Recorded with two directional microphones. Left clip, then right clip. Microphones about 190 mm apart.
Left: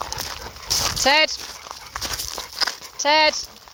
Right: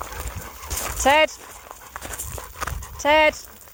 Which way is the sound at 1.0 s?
35° right (ahead or behind).